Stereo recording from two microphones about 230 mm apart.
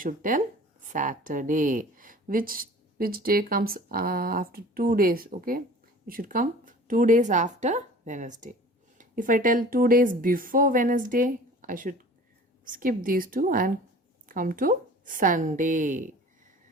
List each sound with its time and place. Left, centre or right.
0.0 s speech: right